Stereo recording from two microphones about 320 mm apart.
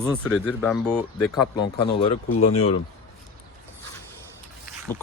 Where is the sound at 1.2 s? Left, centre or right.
Left.